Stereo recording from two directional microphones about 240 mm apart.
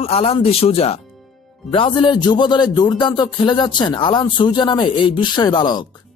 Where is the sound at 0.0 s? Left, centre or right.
Left.